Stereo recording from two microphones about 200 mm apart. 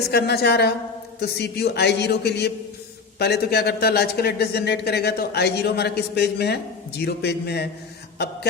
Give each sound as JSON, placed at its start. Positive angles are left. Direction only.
{"t": 0.1, "sound": "speech", "side_deg": 55}